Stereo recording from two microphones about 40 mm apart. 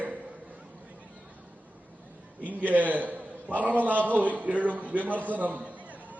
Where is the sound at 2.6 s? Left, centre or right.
Right.